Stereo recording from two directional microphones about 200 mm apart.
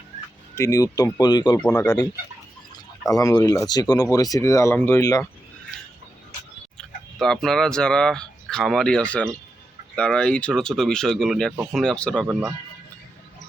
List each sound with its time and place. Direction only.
0.5 s speech: 15° left (ahead or behind)
1.5 s speech: 10° left (ahead or behind)
3.1 s speech: 15° left (ahead or behind)
6.7 s speech: 5° left (ahead or behind)
12.3 s speech: 10° right (ahead or behind)